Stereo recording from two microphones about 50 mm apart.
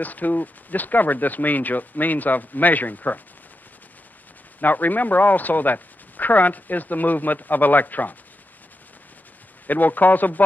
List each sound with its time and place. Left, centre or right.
0.0 s speech: left
4.6 s speech: left
9.7 s speech: left